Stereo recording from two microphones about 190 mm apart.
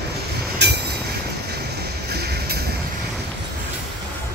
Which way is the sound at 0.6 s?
60° right (ahead or behind).